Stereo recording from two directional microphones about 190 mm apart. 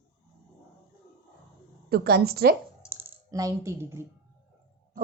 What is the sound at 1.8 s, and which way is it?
Speech, 55° right (ahead or behind).